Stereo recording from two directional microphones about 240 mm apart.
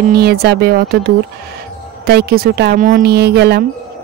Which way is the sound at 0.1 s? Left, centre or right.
Right.